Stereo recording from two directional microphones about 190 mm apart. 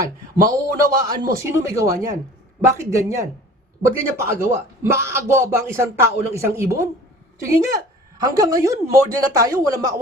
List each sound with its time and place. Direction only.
0.0 s a man's voice: 20° right (ahead or behind)